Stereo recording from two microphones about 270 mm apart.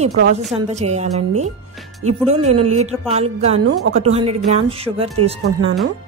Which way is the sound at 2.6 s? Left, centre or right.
Right.